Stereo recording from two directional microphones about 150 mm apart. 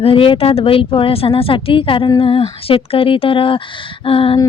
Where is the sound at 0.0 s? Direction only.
35° left (ahead or behind).